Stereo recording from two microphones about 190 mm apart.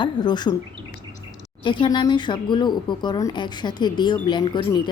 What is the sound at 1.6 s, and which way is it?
Speech, 25° left (ahead or behind).